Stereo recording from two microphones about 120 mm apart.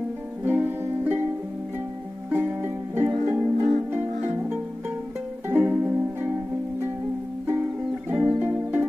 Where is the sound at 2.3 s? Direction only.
20° right (ahead or behind).